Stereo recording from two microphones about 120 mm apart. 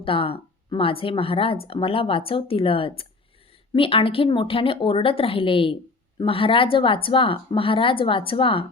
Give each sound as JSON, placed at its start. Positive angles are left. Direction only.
{"t": 0.0, "sound": "speech", "side_deg": 50}